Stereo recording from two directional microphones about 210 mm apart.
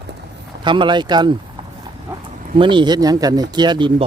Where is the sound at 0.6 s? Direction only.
20° right (ahead or behind).